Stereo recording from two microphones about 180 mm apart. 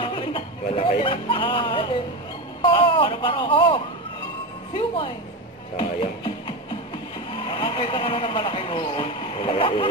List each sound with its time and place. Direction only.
0.0 s a sound: 30° left (ahead or behind)
2.6 s speech: 30° left (ahead or behind)
5.8 s speech: 25° left (ahead or behind)
7.4 s speech: 30° left (ahead or behind)